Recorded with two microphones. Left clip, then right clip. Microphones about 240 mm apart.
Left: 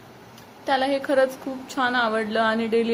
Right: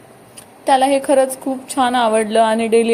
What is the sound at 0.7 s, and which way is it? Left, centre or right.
A woman's voice, right.